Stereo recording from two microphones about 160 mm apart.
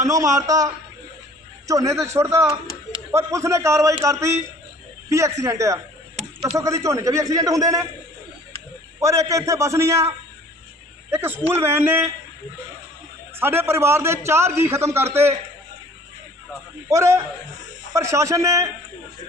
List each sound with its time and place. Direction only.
0.0 s a man's voice: 20° right (ahead or behind)
9.0 s a man's voice: 20° right (ahead or behind)
13.4 s a man's voice: 15° right (ahead or behind)
16.9 s a man's voice: 15° right (ahead or behind)